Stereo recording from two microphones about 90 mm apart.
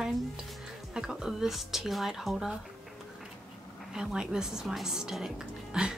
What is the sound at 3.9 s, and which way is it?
Speech, 5° right (ahead or behind).